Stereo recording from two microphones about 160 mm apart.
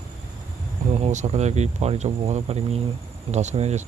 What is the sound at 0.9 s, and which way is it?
A man's voice, 45° right (ahead or behind).